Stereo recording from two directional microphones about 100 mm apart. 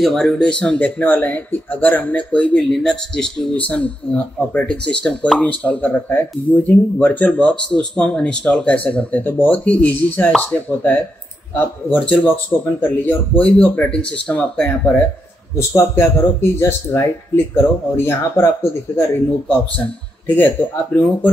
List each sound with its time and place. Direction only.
0.0 s speech: 5° left (ahead or behind)
15.5 s a man's voice: 25° left (ahead or behind)